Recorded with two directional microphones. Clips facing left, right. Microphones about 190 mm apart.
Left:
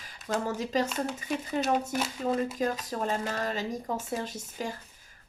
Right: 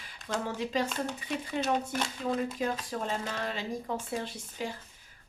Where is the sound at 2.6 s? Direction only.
45° left (ahead or behind).